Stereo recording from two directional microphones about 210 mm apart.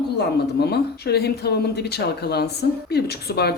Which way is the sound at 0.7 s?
50° left (ahead or behind).